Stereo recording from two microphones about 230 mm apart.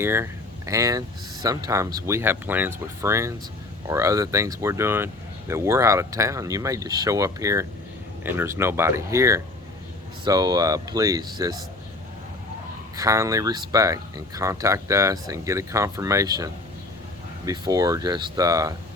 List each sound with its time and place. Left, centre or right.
0.0 s speech: centre
13.0 s speech: centre